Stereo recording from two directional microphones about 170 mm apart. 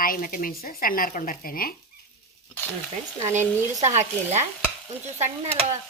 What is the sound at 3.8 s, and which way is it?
Speech, 40° right (ahead or behind).